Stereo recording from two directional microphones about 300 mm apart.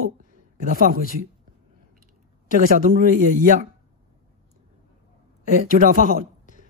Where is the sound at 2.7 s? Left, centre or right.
Right.